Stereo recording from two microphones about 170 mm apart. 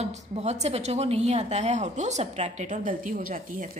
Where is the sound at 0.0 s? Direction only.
40° right (ahead or behind).